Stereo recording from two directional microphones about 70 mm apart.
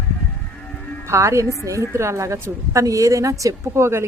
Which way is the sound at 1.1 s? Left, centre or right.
Right.